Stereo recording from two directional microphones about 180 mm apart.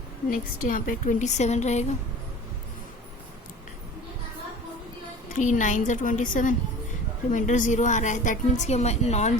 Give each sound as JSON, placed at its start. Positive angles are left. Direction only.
{"t": 0.3, "sound": "a woman's voice", "side_deg": 50}
{"t": 5.3, "sound": "a woman's voice", "side_deg": 45}